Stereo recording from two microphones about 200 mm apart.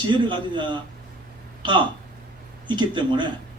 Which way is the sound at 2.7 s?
25° right (ahead or behind).